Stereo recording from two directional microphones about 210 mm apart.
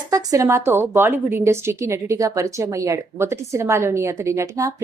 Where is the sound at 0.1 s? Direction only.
15° right (ahead or behind).